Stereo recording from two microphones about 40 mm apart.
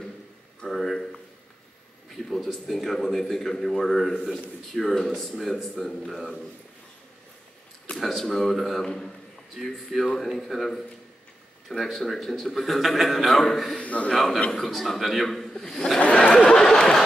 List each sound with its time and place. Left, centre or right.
0.6 s a sound: centre
2.2 s a man's voice: centre
8.0 s a man's voice: centre
8.8 s a man's voice: centre
11.8 s a man's voice: centre
13.7 s a man's voice: left
14.1 s a man's voice: centre
16.0 s a sound: left
16.3 s a sound: centre